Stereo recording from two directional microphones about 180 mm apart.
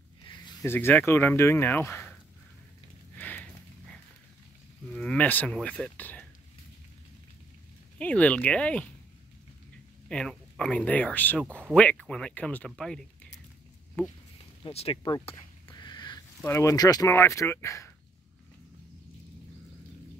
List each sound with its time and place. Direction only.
0.3 s speech: 20° left (ahead or behind)
3.2 s horse: 10° left (ahead or behind)
4.9 s speech: 5° left (ahead or behind)
8.0 s speech: 5° left (ahead or behind)
10.0 s speech: 5° left (ahead or behind)
14.6 s speech: 35° left (ahead or behind)
15.2 s a sound: 25° left (ahead or behind)
16.4 s speech: 15° left (ahead or behind)